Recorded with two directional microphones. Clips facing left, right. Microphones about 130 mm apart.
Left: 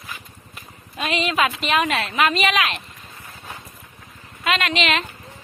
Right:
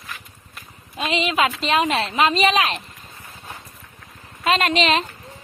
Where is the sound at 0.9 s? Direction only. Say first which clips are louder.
Right 1 dB; 20° right (ahead or behind).